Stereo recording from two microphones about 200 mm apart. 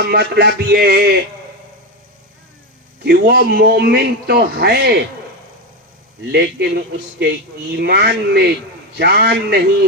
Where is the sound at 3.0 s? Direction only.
55° right (ahead or behind).